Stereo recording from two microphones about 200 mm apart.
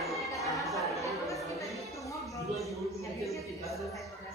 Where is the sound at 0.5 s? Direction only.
Centre (ahead or behind).